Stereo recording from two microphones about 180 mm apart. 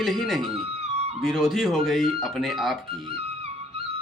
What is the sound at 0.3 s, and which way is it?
Music, 30° right (ahead or behind).